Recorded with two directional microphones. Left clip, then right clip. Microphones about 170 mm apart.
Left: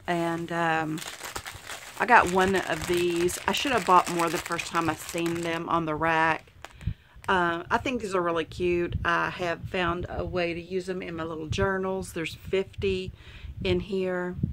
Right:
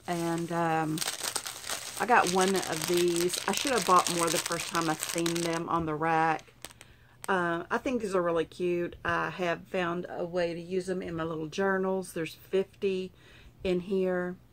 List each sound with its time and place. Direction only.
0.0 s a sound: 45° left (ahead or behind)
0.9 s crumpling: 5° left (ahead or behind)
2.0 s speech: 40° left (ahead or behind)
2.9 s speech: 5° left (ahead or behind)
3.4 s speech: 40° left (ahead or behind)